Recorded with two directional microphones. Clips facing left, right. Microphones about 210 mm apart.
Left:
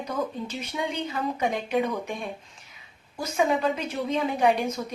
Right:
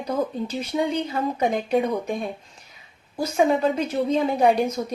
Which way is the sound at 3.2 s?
35° right (ahead or behind).